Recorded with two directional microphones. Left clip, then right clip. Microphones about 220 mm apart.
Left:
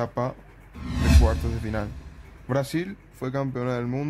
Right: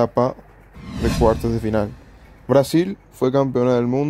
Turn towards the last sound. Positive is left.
turn(degrees=-20)  # may be behind; listen again after turning